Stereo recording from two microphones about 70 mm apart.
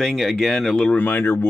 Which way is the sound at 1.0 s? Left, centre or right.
Left.